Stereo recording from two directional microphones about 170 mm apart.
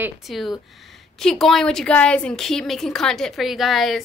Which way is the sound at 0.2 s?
Centre (ahead or behind).